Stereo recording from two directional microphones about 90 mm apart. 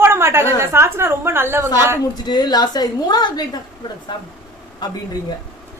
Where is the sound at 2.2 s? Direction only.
50° left (ahead or behind).